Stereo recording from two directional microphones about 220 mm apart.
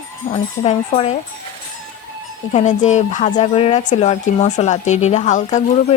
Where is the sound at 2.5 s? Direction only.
30° left (ahead or behind).